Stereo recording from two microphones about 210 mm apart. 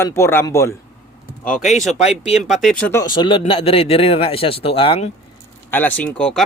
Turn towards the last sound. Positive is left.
turn(degrees=5)  # may be behind; listen again after turning